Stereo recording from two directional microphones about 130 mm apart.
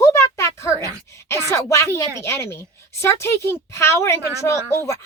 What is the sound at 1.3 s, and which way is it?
Speech, 20° left (ahead or behind).